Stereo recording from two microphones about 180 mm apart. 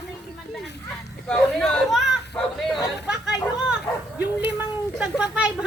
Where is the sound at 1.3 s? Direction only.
5° left (ahead or behind).